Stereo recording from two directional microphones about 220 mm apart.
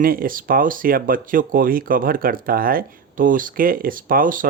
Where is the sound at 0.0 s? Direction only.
40° right (ahead or behind).